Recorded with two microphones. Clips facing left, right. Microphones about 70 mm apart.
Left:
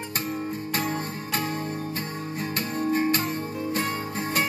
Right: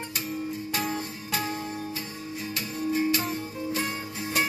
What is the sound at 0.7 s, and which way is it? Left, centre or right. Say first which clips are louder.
Music: left 3 dB; left.